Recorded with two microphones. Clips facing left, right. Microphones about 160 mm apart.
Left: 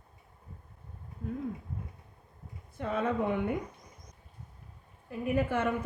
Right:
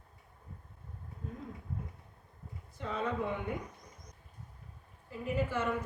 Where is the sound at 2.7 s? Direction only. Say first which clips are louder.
Left 5 dB; 55° left (ahead or behind).